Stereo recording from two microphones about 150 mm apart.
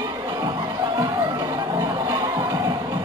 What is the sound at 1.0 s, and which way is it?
Music, 25° right (ahead or behind).